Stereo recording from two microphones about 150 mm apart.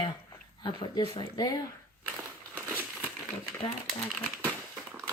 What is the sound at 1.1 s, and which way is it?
Speech, 30° left (ahead or behind).